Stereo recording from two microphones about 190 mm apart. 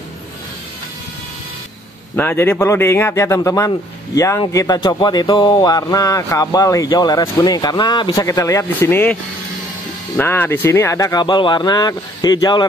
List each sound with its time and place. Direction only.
2.1 s a man's voice: 10° left (ahead or behind)